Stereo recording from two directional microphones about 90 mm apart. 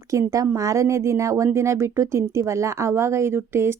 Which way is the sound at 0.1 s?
35° right (ahead or behind).